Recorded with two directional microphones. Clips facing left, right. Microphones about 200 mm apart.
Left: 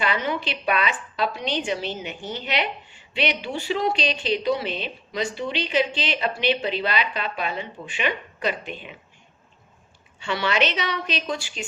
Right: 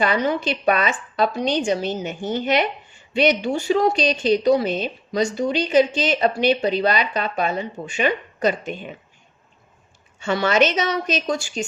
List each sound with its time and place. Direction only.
0.0 s a woman's voice: 40° right (ahead or behind)
10.2 s a woman's voice: 45° right (ahead or behind)